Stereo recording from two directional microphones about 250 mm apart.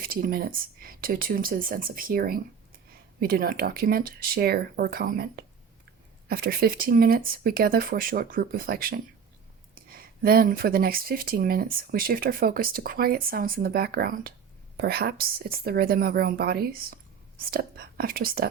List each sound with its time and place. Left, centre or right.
0.0 s speech: right